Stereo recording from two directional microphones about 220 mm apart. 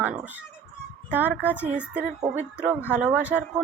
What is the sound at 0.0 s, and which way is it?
Speech, 5° right (ahead or behind).